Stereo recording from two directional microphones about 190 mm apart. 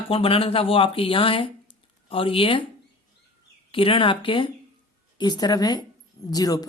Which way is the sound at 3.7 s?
30° left (ahead or behind).